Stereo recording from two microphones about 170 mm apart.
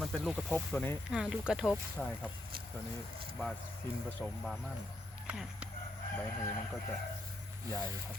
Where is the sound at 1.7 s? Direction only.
10° left (ahead or behind).